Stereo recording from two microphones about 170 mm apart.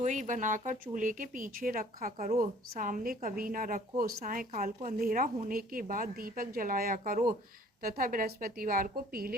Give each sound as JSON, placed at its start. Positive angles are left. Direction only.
{"t": 0.0, "sound": "a woman's voice", "side_deg": -45}